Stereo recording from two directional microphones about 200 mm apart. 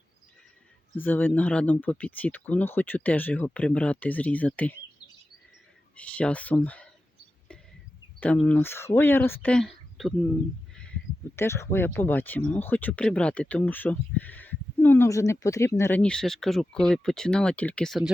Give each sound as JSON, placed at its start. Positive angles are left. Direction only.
{"t": 0.9, "sound": "speech", "side_deg": 10}
{"t": 6.0, "sound": "speech", "side_deg": 5}
{"t": 8.2, "sound": "speech", "side_deg": 5}
{"t": 11.3, "sound": "speech", "side_deg": 15}